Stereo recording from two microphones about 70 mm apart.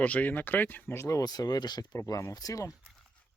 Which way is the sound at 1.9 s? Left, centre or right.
Left.